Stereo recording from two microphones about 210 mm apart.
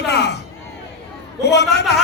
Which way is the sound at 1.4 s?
55° left (ahead or behind).